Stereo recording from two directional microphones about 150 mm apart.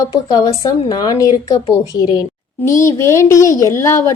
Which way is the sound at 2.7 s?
20° left (ahead or behind).